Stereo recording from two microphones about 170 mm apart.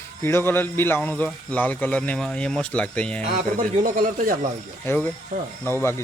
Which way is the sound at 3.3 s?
50° right (ahead or behind).